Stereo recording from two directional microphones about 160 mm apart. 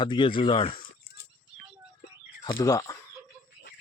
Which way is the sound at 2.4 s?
20° left (ahead or behind).